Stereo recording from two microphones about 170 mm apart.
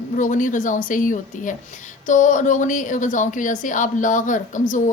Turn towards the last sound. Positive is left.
turn(degrees=50)  # may be behind; listen again after turning